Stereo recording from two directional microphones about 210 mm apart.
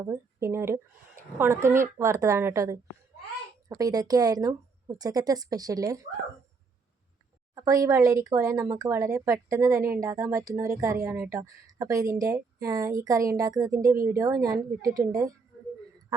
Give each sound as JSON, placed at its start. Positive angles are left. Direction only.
{"t": 0.0, "sound": "a woman's voice", "side_deg": -15}
{"t": 7.5, "sound": "speech", "side_deg": -15}